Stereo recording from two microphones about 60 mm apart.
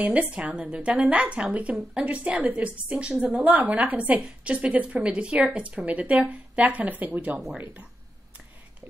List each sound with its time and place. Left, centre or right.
0.0 s speech: right